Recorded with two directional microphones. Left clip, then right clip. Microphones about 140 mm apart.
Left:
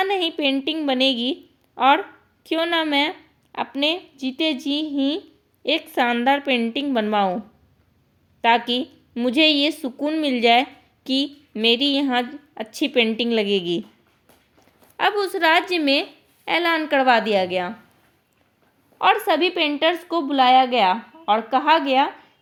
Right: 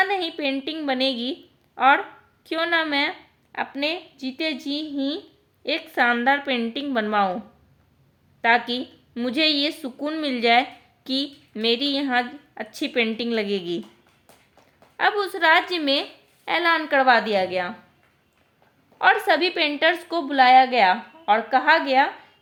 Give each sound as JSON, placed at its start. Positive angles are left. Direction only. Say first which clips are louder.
{"t": 0.0, "sound": "a woman's voice", "louder": "left 2 dB", "side_deg": 30}
{"t": 8.4, "sound": "a woman's voice", "louder": "left 2 dB", "side_deg": 35}
{"t": 14.9, "sound": "a woman's voice", "louder": "left 1 dB", "side_deg": 40}
{"t": 18.9, "sound": "a woman's voice", "louder": "even", "side_deg": 15}